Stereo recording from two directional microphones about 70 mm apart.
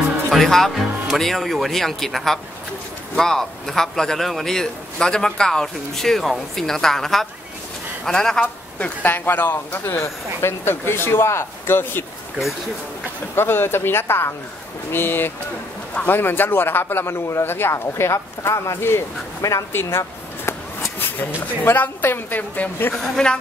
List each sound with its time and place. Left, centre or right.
0.3 s speech: centre
8.7 s speech: left
13.4 s speech: left
19.8 s a sound: left
21.6 s a woman's voice: left
22.9 s speech: centre